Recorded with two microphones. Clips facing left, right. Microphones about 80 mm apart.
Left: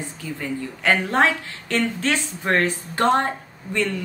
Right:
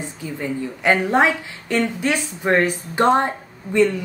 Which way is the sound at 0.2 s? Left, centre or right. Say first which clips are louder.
Right 3 dB; centre.